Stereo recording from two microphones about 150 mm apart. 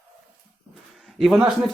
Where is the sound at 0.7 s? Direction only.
Centre (ahead or behind).